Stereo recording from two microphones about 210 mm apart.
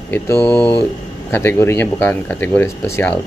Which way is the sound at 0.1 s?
10° left (ahead or behind).